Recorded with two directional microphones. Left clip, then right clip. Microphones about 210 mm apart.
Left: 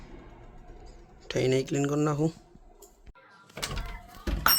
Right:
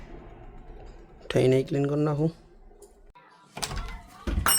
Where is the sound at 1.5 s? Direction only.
10° right (ahead or behind).